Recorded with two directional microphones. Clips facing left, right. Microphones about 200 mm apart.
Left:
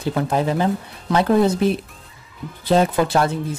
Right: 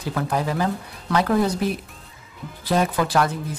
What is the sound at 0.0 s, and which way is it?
Speech, 25° left (ahead or behind).